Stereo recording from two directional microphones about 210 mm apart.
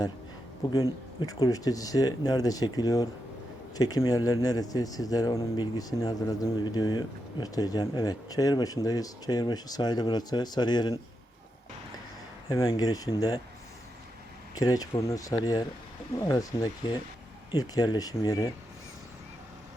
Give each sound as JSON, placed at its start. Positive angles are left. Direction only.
{"t": 0.7, "sound": "speech", "side_deg": 15}
{"t": 12.5, "sound": "speech", "side_deg": 20}
{"t": 14.5, "sound": "speech", "side_deg": 15}